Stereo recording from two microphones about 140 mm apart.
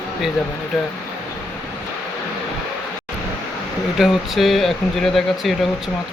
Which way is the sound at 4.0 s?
Centre (ahead or behind).